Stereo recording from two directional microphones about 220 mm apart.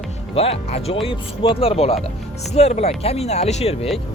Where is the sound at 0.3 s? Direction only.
25° left (ahead or behind).